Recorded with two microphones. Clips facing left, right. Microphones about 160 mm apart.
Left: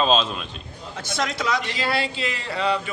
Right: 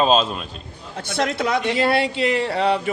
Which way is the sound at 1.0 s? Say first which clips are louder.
Right 4 dB; 60° right (ahead or behind).